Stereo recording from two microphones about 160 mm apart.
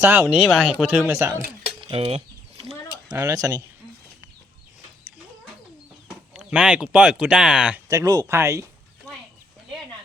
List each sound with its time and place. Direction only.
0.0 s speech: 15° right (ahead or behind)
1.8 s chicken: 35° right (ahead or behind)
3.1 s speech: 20° right (ahead or behind)
6.3 s speech: 5° right (ahead or behind)
7.9 s speech: 20° right (ahead or behind)